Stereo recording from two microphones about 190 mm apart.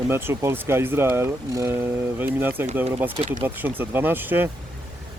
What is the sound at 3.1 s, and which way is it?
Speech, 40° right (ahead or behind).